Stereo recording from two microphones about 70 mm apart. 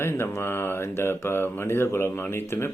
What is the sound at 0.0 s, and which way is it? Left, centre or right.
Speech, left.